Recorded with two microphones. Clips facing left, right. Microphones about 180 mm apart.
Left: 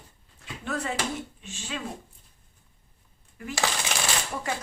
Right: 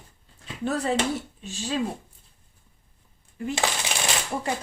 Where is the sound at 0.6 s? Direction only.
35° right (ahead or behind).